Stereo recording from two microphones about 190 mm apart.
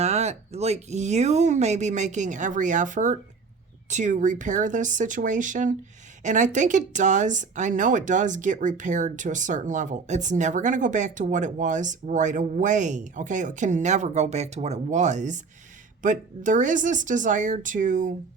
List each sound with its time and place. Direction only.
0.0 s speech: 35° right (ahead or behind)